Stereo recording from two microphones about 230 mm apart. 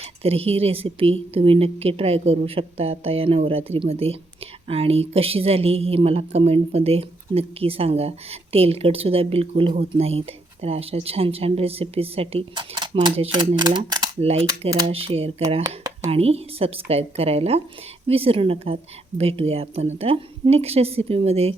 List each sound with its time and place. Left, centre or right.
0.0 s a woman's voice: right